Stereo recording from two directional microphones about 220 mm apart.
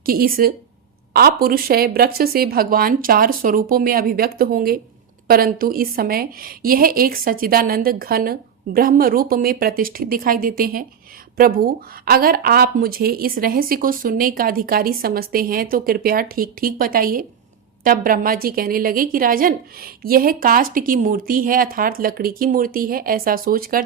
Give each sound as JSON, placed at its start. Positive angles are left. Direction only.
{"t": 0.0, "sound": "a woman's voice", "side_deg": -40}